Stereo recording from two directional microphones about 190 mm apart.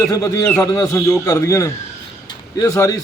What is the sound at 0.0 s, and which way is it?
A man's voice, 15° left (ahead or behind).